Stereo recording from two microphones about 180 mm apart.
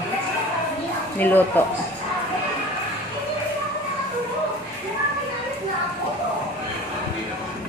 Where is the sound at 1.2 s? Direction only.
10° left (ahead or behind).